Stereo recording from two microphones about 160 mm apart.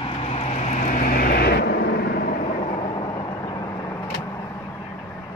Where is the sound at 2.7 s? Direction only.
30° left (ahead or behind).